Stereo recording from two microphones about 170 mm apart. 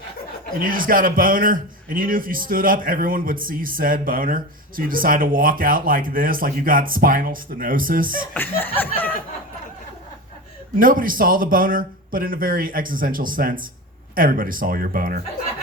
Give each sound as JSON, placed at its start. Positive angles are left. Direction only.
{"t": 0.6, "sound": "a man's voice", "side_deg": -55}
{"t": 8.3, "sound": "laughter", "side_deg": 10}
{"t": 10.8, "sound": "a man's voice", "side_deg": -55}